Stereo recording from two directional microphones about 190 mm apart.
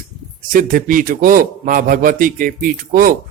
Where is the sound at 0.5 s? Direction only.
45° right (ahead or behind).